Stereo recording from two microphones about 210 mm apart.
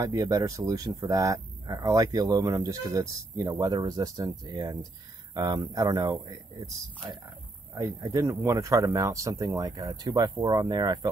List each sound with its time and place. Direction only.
0.0 s speech: 15° right (ahead or behind)